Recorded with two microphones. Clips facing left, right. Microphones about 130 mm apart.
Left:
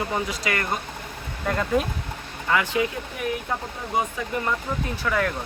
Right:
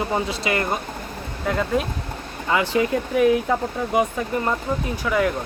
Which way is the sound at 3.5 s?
90° right.